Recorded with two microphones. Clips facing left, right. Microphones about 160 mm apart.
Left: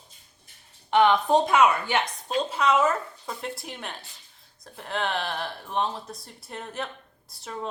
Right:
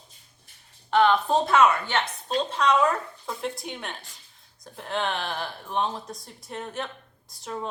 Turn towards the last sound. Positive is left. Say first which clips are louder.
# right 3 dB
turn(degrees=0)  # may be behind; listen again after turning